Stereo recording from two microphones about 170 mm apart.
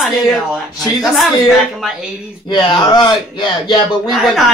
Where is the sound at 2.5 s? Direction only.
30° left (ahead or behind).